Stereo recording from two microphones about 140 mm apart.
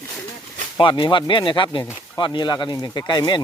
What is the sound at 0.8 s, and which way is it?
Speech, 35° left (ahead or behind).